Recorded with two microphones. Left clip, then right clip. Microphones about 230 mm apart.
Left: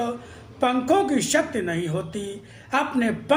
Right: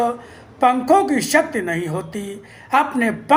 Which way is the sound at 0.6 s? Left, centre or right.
Centre.